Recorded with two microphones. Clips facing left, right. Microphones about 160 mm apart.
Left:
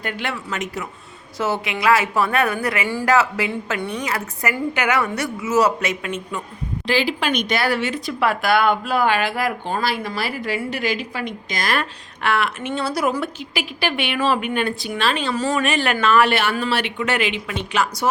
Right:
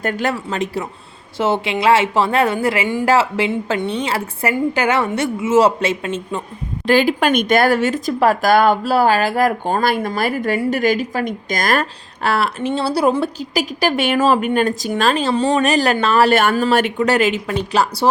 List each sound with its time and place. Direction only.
0.0 s speech: 40° right (ahead or behind)
6.8 s speech: 50° right (ahead or behind)
15.4 s speech: 25° right (ahead or behind)
15.6 s speech: 40° right (ahead or behind)